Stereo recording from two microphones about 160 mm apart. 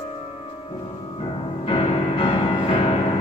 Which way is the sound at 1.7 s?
35° left (ahead or behind).